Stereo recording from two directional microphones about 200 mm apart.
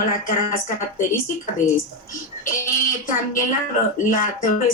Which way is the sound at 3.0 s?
40° left (ahead or behind).